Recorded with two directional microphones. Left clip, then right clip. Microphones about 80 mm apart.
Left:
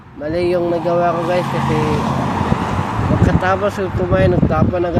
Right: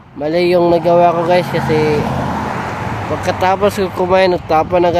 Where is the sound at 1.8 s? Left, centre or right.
Centre.